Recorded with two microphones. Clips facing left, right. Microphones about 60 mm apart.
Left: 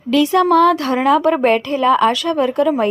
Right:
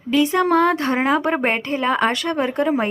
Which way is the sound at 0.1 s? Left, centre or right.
Right.